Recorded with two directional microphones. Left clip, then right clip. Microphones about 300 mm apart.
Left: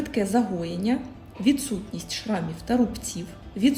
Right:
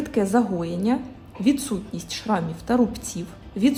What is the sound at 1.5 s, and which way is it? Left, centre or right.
A woman's voice, right.